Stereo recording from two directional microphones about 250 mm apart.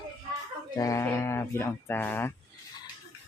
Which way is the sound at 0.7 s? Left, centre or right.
Centre.